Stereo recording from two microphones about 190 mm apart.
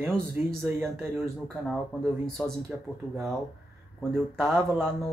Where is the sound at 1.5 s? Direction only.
Centre (ahead or behind).